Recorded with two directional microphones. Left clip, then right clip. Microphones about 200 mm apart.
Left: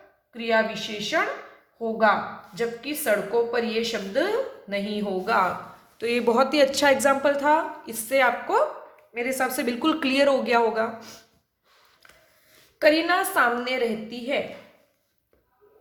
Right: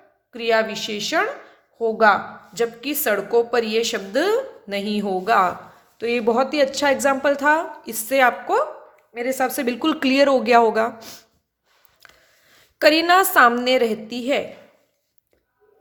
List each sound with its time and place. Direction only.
0.3 s a woman's voice: 60° right (ahead or behind); by 5.5 s 45° right (ahead or behind)
6.0 s a woman's voice: 20° right (ahead or behind); by 11.2 s 45° right (ahead or behind)
12.0 s a sound: 45° right (ahead or behind)
12.8 s a woman's voice: 45° right (ahead or behind)